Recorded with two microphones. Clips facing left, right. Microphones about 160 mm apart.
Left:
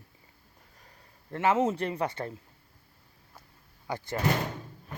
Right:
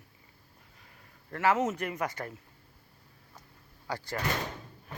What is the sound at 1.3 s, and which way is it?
Speech, 25° left (ahead or behind).